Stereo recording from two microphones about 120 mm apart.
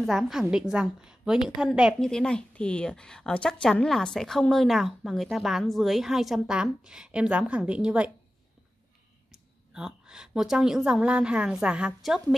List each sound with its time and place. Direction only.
0.0 s a woman's voice: centre (ahead or behind)
2.0 s a woman's voice: 5° left (ahead or behind)
9.3 s a woman's voice: 5° right (ahead or behind)